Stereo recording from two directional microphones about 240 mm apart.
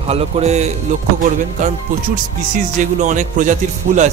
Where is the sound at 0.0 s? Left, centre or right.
Right.